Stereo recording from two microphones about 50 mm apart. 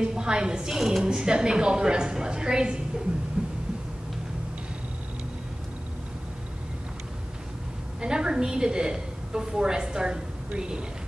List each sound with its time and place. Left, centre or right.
0.0 s a woman's voice: centre
3.4 s heart sounds: centre
8.0 s a woman's voice: centre